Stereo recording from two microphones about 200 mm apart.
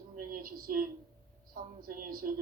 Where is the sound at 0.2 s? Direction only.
45° right (ahead or behind).